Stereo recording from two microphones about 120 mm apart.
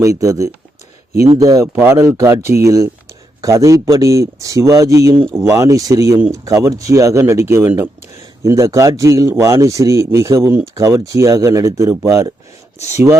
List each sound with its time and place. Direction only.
0.0 s speech: 25° right (ahead or behind)